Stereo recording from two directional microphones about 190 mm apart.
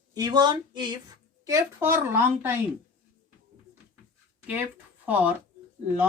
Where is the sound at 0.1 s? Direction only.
20° right (ahead or behind).